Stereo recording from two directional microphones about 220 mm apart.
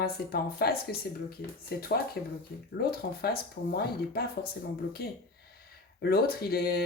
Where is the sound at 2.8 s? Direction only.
45° left (ahead or behind).